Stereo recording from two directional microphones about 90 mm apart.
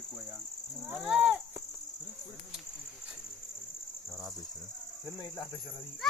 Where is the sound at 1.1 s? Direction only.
5° right (ahead or behind).